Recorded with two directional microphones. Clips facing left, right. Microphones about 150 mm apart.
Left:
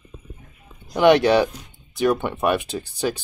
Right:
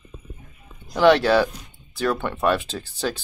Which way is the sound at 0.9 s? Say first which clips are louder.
Left 1 dB; 15° left (ahead or behind).